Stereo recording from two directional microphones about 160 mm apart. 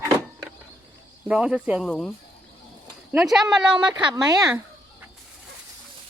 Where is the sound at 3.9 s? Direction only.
25° right (ahead or behind).